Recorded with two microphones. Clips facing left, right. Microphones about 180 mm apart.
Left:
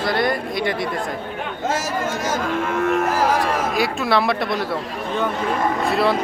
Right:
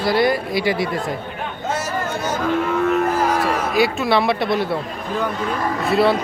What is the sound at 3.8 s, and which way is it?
Speech, centre (ahead or behind).